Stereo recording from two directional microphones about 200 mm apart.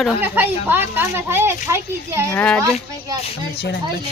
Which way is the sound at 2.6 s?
15° right (ahead or behind).